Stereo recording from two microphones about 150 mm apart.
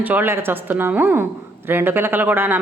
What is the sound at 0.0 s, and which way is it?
A woman's voice, 10° right (ahead or behind).